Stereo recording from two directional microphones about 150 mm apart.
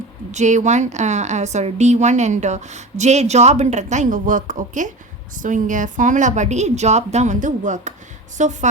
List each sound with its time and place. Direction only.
0.3 s a woman's voice: 50° right (ahead or behind)